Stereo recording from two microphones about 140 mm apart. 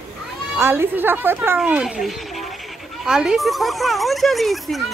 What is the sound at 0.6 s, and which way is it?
A woman's voice, 15° right (ahead or behind).